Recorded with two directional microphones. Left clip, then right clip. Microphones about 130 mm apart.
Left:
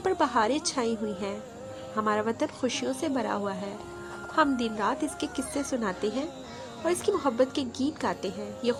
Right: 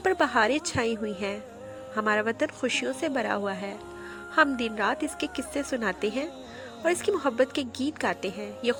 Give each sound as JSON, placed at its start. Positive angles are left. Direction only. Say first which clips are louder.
{"t": 0.0, "sound": "a woman's voice", "louder": "right 2 dB", "side_deg": -35}